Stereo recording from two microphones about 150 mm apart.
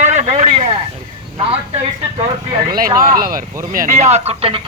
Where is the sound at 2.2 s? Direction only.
30° right (ahead or behind).